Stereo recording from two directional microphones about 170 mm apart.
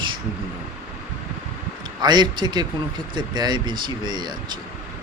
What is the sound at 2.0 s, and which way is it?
A man's voice, 25° right (ahead or behind).